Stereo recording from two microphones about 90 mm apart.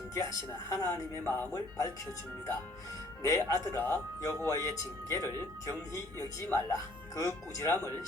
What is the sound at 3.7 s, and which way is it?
Speech, 25° left (ahead or behind).